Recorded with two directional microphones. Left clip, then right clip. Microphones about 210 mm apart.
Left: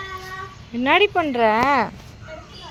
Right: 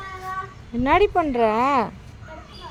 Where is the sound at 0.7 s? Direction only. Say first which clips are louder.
Left 1 dB; centre (ahead or behind).